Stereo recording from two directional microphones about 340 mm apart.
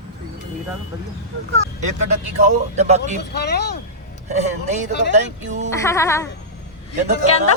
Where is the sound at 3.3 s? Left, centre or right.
Left.